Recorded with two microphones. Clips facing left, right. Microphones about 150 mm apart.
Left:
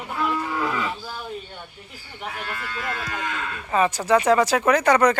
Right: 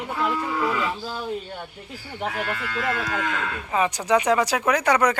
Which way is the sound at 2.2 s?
75° right (ahead or behind).